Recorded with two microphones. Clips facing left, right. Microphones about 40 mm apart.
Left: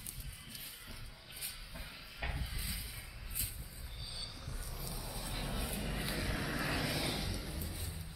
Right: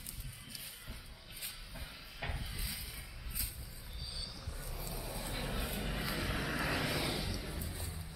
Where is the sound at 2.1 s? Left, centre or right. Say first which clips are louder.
Even; centre.